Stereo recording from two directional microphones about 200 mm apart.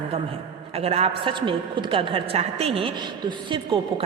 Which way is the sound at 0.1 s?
30° right (ahead or behind).